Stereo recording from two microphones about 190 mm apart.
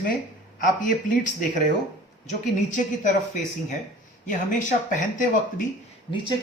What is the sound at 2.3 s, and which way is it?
Speech, 40° left (ahead or behind).